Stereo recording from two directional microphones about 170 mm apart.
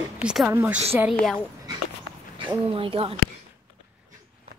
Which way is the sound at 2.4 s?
30° right (ahead or behind).